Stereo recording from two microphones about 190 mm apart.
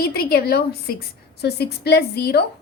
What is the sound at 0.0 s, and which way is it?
A woman's voice, 55° left (ahead or behind).